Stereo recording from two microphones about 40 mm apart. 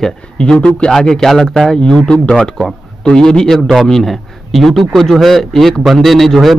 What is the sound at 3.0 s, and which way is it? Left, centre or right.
Speech, centre.